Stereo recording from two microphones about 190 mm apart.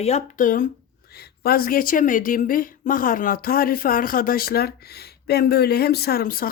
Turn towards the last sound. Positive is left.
turn(degrees=50)  # may be behind; listen again after turning